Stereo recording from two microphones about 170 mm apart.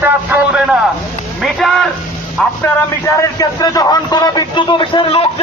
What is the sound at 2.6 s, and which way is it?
A man's voice, 15° left (ahead or behind).